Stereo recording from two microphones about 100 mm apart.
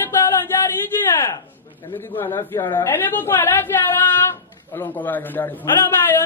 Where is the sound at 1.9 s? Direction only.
20° left (ahead or behind).